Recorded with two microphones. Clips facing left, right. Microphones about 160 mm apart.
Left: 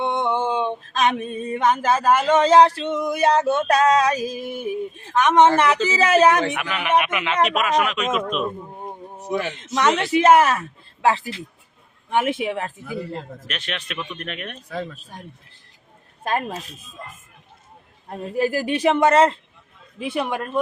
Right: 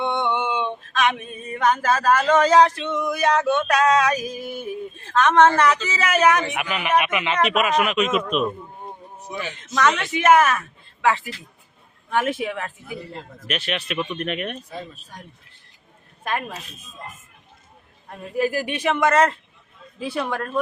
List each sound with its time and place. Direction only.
0.0 s male singing: 40° left (ahead or behind)
6.6 s a man's voice: 5° right (ahead or behind)
9.7 s male singing: 25° left (ahead or behind)
11.0 s a woman's voice: 30° left (ahead or behind)
12.1 s male singing: 20° left (ahead or behind)
13.5 s speech: 10° right (ahead or behind)
14.7 s speech: 90° left
16.2 s a woman's voice: 35° left (ahead or behind)
18.1 s a woman's voice: 35° left (ahead or behind); by 20.6 s 15° left (ahead or behind)